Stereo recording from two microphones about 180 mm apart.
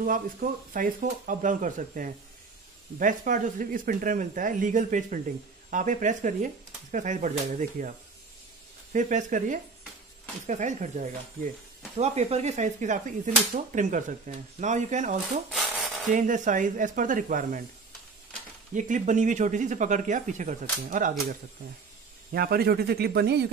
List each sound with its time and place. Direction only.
0.0 s speech: 50° right (ahead or behind)
8.9 s speech: 45° right (ahead or behind)
15.7 s filing: 5° right (ahead or behind)
16.1 s speech: 45° right (ahead or behind)
18.8 s speech: 45° right (ahead or behind)
22.3 s speech: 60° right (ahead or behind)